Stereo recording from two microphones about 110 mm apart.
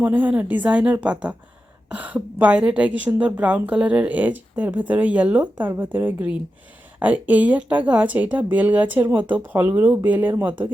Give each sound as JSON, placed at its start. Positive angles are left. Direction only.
{"t": 0.0, "sound": "a woman's voice", "side_deg": -15}